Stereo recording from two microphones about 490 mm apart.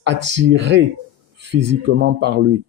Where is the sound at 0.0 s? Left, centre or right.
Right.